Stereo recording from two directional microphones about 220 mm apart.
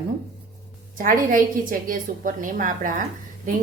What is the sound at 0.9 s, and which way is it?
A woman's voice, 40° right (ahead or behind).